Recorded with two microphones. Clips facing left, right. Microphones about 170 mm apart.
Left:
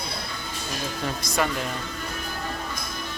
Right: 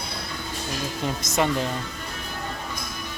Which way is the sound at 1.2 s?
20° right (ahead or behind).